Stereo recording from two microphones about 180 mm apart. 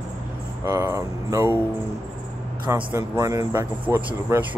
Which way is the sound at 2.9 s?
15° right (ahead or behind).